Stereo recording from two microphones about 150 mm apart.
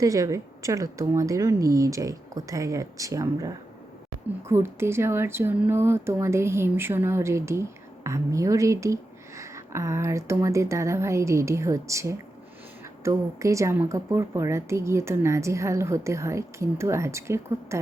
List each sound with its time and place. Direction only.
0.0 s speech: 20° right (ahead or behind)